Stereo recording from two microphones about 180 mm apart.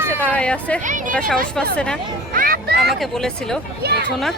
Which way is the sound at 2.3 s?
55° right (ahead or behind).